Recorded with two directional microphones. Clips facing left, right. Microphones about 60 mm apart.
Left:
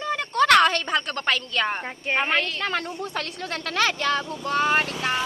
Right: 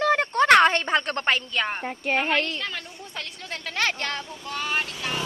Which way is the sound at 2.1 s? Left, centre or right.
Left.